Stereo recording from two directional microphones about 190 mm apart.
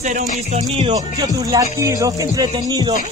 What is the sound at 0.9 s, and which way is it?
Music, 20° right (ahead or behind).